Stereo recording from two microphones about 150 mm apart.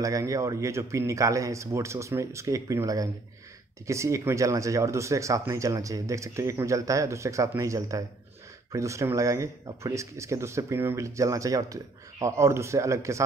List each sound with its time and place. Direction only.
0.0 s speech: 20° right (ahead or behind)